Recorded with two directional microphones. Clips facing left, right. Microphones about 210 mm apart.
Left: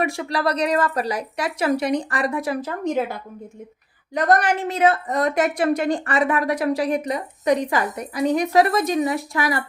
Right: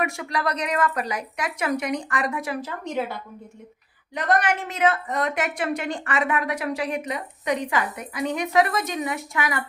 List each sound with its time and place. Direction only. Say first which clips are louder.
0.0 s a woman's voice: left 4 dB; 35° left (ahead or behind)
4.1 s a woman's voice: left 4 dB; 40° left (ahead or behind)